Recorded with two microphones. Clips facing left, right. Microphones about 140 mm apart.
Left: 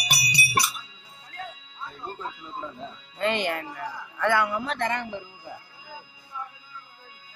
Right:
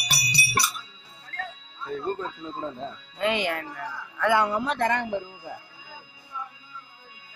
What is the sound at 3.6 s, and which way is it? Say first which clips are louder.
Speech: left 1 dB; 10° left (ahead or behind).